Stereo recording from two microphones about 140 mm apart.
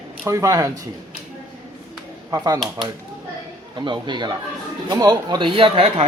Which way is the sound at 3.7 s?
30° right (ahead or behind).